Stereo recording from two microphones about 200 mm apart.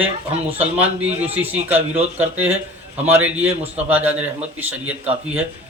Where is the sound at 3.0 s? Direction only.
10° right (ahead or behind).